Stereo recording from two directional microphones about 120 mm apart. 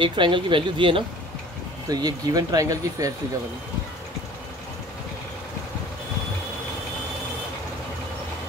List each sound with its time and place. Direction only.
0.0 s speech: 40° right (ahead or behind)
1.9 s speech: 35° right (ahead or behind)